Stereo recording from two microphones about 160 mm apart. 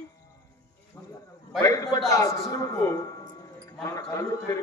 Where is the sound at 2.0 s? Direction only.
20° left (ahead or behind).